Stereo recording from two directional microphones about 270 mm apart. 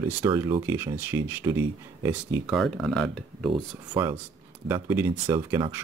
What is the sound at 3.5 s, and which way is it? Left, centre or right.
Speech, centre.